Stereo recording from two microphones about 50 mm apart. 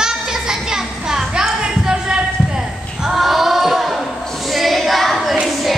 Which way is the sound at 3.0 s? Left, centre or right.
Centre.